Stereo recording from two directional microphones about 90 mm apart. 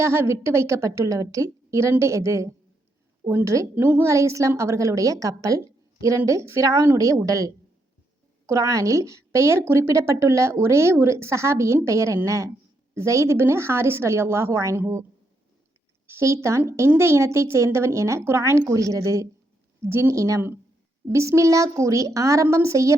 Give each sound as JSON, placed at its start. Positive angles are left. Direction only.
{"t": 0.0, "sound": "a woman's voice", "side_deg": -30}
{"t": 16.0, "sound": "a woman's voice", "side_deg": -30}